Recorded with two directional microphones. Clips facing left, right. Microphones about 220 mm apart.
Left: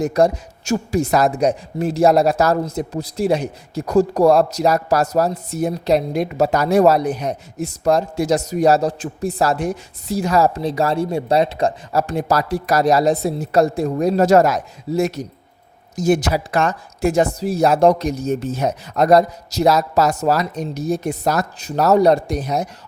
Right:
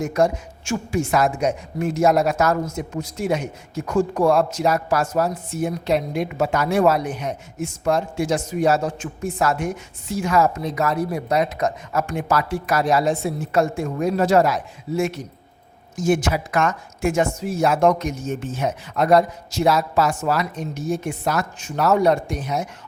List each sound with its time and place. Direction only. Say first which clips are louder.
0.0 s speech: left 4 dB; 35° left (ahead or behind)